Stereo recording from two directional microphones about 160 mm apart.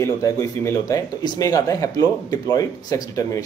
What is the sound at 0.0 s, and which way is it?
Speech, 20° left (ahead or behind).